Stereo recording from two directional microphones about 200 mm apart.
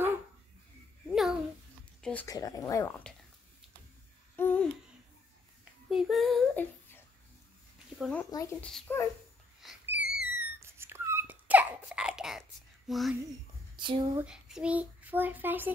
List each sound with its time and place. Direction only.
1.0 s babbling: centre (ahead or behind)
2.0 s a sound: 5° left (ahead or behind)
2.2 s speech: 15° left (ahead or behind)
4.4 s a sound: 10° left (ahead or behind)
5.9 s child singing: centre (ahead or behind)
8.0 s speech: 5° left (ahead or behind)
9.6 s a sound: 5° right (ahead or behind)
13.7 s speech: 25° right (ahead or behind)
14.2 s a child's voice: 5° right (ahead or behind)